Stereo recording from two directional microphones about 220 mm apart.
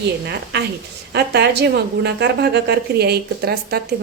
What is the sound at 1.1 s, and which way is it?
A woman's voice, 50° right (ahead or behind).